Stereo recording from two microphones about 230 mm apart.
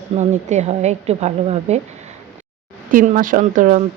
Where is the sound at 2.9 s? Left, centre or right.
Right.